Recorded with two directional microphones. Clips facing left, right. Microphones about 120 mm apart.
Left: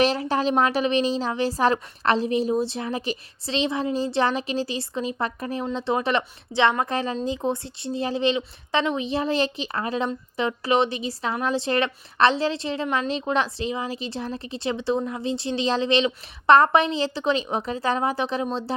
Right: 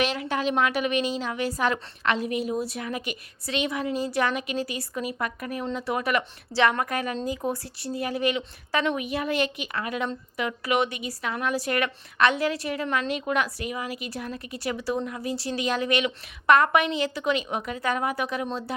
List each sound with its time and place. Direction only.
0.0 s a woman's voice: 35° left (ahead or behind)